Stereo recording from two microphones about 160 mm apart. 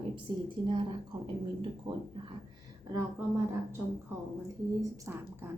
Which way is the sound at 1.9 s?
30° right (ahead or behind).